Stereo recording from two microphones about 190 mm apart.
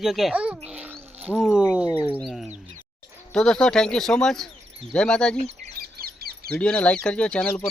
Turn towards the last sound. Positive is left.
turn(degrees=5)  # may be behind; listen again after turning